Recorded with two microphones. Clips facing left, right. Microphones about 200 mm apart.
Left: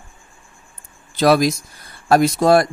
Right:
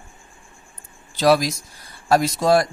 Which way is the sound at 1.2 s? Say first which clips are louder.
Left 3 dB; 55° left (ahead or behind).